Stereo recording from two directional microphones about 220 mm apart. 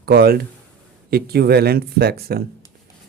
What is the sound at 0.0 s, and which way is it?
Speech, 45° right (ahead or behind).